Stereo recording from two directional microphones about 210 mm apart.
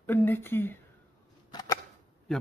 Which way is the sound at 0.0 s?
10° left (ahead or behind).